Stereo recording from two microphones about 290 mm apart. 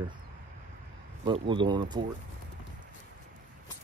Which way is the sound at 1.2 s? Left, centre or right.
Centre.